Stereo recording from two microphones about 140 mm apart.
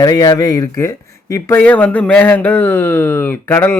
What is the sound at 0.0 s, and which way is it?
A man's voice, 25° left (ahead or behind).